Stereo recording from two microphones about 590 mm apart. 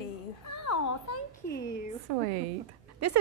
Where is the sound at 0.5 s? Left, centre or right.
Left.